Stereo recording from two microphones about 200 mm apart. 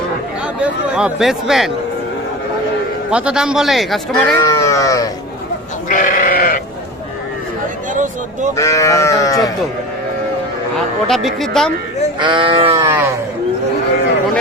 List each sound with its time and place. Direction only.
0.6 s speech: 5° right (ahead or behind)
3.1 s speech: 5° right (ahead or behind)
4.1 s speech: 15° left (ahead or behind)
5.9 s sheep: 45° left (ahead or behind)
7.9 s a sound: 40° right (ahead or behind)
8.5 s speech: 15° left (ahead or behind)
11.1 s speech: centre (ahead or behind)
12.2 s speech: 25° right (ahead or behind)
12.7 s livestock: 15° right (ahead or behind)